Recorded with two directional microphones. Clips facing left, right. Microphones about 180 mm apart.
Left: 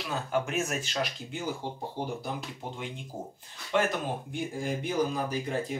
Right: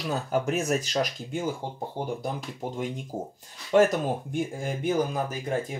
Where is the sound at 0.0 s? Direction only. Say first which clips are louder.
Right 3 dB; 40° right (ahead or behind).